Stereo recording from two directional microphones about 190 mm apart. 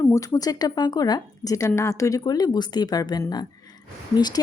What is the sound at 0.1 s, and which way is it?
A woman's voice, 20° left (ahead or behind).